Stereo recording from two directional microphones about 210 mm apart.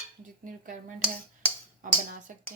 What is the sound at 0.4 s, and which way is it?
Speech, 40° right (ahead or behind).